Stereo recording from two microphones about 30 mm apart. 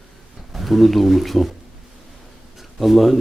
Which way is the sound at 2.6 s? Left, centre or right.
Centre.